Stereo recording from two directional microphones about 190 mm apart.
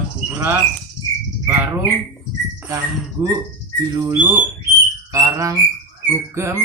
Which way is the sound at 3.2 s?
20° right (ahead or behind).